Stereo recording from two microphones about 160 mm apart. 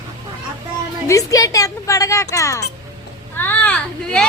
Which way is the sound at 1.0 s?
20° left (ahead or behind).